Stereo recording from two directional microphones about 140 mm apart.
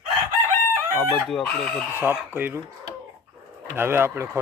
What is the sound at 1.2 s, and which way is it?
Chicken, 5° left (ahead or behind).